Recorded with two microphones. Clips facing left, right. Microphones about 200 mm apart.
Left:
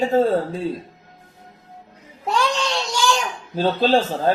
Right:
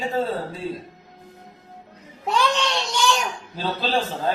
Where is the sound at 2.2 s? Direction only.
Centre (ahead or behind).